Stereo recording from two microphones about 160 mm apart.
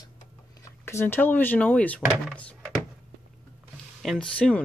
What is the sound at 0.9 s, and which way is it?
Speech, 15° left (ahead or behind).